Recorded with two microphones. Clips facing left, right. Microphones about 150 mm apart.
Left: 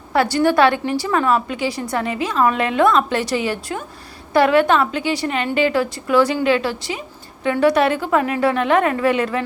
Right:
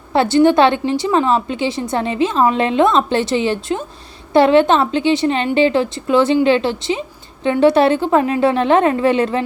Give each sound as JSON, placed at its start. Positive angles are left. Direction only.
{"t": 0.1, "sound": "a woman's voice", "side_deg": -25}